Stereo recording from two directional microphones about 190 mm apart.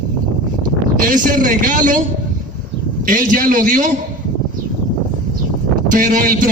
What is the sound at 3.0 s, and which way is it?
Speech, 45° right (ahead or behind).